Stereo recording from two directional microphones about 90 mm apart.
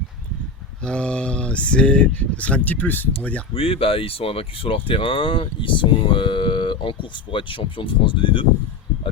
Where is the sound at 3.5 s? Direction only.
90° left.